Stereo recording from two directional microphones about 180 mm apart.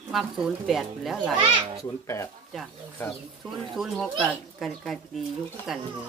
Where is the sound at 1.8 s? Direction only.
15° left (ahead or behind).